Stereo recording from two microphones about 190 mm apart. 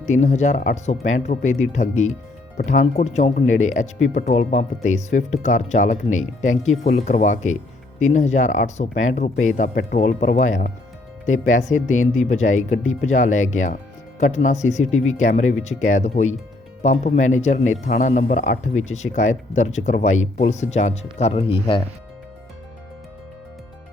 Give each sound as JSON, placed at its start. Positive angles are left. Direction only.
{"t": 0.1, "sound": "speech", "side_deg": 40}